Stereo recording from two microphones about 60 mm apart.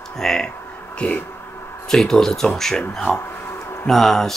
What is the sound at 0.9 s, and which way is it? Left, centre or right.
Speech, left.